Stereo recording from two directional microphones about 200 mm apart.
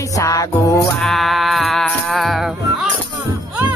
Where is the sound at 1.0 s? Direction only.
Centre (ahead or behind).